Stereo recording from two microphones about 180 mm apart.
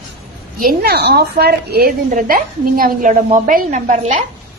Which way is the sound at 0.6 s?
60° right (ahead or behind).